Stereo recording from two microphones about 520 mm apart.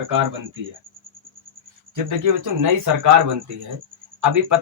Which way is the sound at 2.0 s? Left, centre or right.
Right.